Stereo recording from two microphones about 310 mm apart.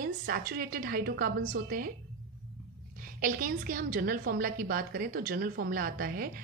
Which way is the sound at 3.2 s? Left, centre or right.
Right.